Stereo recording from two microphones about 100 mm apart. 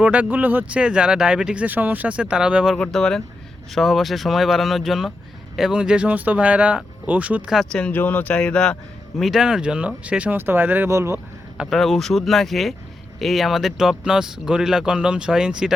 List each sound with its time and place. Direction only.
0.0 s speech: 15° right (ahead or behind)
2.7 s speech: 5° left (ahead or behind); by 7.5 s 15° right (ahead or behind)
7.7 s speech: 10° left (ahead or behind); by 10.8 s 15° right (ahead or behind)
10.8 s speech: 30° right (ahead or behind)
11.5 s speech: 5° right (ahead or behind)